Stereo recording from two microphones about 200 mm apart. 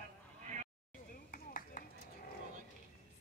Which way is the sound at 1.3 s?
45° left (ahead or behind).